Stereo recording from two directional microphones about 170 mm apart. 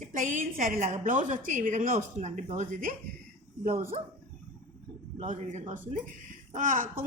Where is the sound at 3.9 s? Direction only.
30° right (ahead or behind).